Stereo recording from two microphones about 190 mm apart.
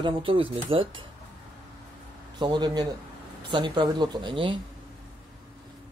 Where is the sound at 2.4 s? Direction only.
20° right (ahead or behind).